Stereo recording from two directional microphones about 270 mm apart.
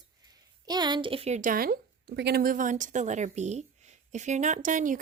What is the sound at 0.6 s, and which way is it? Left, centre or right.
Speech, centre.